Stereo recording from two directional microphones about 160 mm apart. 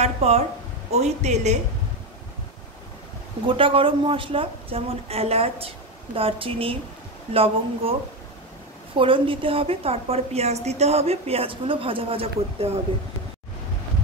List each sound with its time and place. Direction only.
0.0 s a woman's voice: 40° right (ahead or behind)
3.4 s a woman's voice: 35° right (ahead or behind)
8.9 s a woman's voice: 35° right (ahead or behind)